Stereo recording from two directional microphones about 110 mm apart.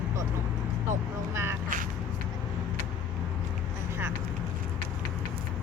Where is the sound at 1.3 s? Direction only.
25° right (ahead or behind).